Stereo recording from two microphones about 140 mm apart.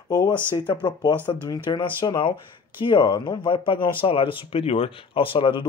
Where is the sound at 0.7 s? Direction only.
30° left (ahead or behind).